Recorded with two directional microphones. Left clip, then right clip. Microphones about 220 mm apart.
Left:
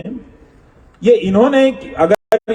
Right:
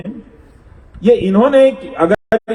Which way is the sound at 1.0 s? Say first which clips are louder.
Even; 35° left (ahead or behind).